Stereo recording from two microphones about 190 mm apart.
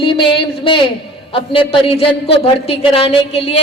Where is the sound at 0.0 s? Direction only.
25° left (ahead or behind).